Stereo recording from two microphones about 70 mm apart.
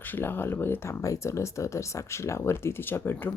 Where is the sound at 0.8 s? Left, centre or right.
Left.